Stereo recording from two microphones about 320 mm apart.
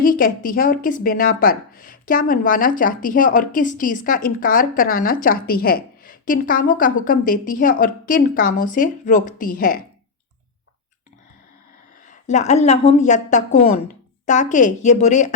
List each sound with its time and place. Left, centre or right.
0.0 s speech: left
12.0 s speech: left